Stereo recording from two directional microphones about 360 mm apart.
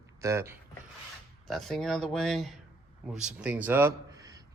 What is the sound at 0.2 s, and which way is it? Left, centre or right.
Speech, centre.